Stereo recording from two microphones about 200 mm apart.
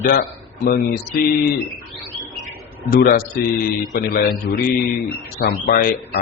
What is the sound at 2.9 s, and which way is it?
Speech, 50° left (ahead or behind).